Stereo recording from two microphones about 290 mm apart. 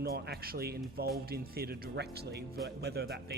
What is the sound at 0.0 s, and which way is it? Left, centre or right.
Speech, right.